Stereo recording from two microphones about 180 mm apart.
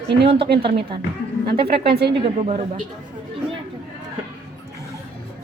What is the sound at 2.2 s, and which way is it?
Speech, 30° right (ahead or behind).